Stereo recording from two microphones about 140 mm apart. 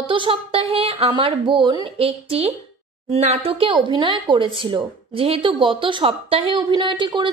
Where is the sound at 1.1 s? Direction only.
35° right (ahead or behind).